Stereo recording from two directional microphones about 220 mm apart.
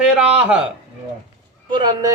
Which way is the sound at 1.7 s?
20° right (ahead or behind).